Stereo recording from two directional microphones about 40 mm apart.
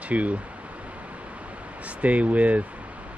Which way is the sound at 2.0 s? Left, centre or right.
Right.